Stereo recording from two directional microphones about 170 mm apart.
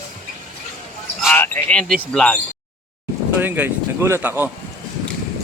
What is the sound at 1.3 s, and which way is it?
A man's voice, 10° left (ahead or behind).